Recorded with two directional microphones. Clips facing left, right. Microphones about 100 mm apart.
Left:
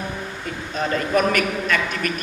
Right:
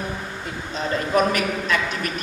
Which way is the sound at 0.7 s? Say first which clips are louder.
Left 1 dB; 50° left (ahead or behind).